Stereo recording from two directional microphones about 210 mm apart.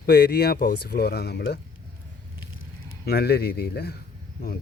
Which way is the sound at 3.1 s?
50° left (ahead or behind).